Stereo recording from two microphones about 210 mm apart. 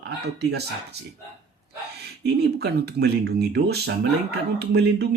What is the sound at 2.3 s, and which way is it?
Speech, 50° right (ahead or behind).